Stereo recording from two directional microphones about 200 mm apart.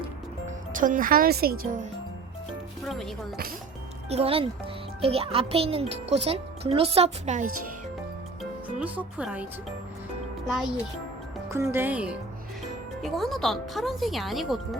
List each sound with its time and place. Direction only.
0.4 s speech: 40° right (ahead or behind)
2.8 s speech: centre (ahead or behind)
4.1 s a child's voice: 30° right (ahead or behind)
8.4 s a child's voice: 5° right (ahead or behind)
11.5 s speech: 10° right (ahead or behind)